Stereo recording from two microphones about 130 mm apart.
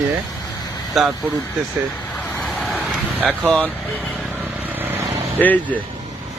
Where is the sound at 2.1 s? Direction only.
5° left (ahead or behind).